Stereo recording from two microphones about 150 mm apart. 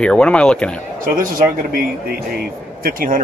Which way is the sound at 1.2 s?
70° right (ahead or behind).